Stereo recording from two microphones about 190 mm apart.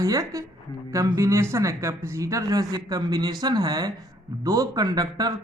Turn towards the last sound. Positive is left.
turn(degrees=-20)  # may be behind; listen again after turning